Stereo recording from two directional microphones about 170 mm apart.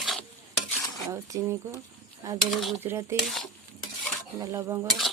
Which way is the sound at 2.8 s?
15° right (ahead or behind).